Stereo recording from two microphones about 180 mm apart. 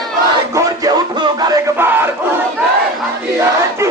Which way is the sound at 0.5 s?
20° right (ahead or behind).